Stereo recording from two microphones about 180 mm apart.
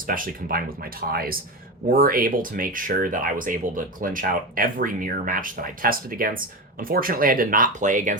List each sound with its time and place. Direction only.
0.1 s speech: 50° right (ahead or behind)